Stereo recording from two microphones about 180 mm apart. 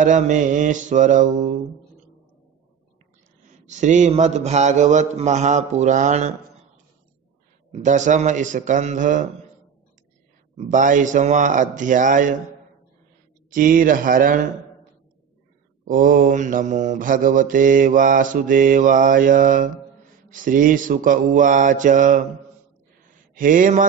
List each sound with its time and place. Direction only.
0.0 s mantra: 45° right (ahead or behind)
3.4 s a man's voice: 40° right (ahead or behind)
7.8 s mantra: 45° right (ahead or behind)
10.6 s mantra: 45° right (ahead or behind)
13.5 s mantra: 50° right (ahead or behind)
15.8 s mantra: 50° right (ahead or behind)
23.3 s mantra: 50° right (ahead or behind)